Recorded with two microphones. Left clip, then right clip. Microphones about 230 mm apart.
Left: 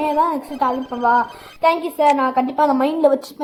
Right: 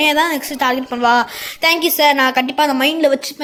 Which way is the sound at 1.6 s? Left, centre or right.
Centre.